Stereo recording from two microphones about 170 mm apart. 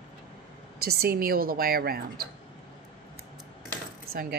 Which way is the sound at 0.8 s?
65° right (ahead or behind).